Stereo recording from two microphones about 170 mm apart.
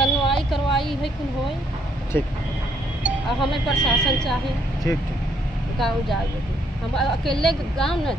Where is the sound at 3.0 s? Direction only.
Centre (ahead or behind).